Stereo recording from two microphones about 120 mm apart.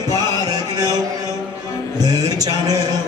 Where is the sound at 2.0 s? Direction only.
35° right (ahead or behind).